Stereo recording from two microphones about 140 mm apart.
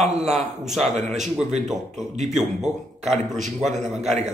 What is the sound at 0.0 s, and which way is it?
A man's voice, 50° right (ahead or behind).